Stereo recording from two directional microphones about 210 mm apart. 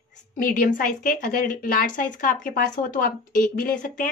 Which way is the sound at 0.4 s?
40° left (ahead or behind).